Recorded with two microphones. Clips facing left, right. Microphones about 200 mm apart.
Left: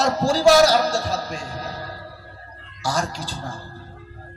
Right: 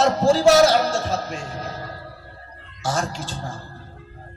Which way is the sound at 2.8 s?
40° left (ahead or behind).